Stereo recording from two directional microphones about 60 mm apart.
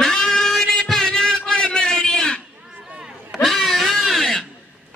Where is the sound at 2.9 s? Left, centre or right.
Centre.